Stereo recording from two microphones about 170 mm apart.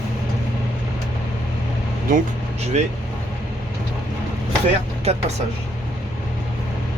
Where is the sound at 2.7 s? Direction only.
40° right (ahead or behind).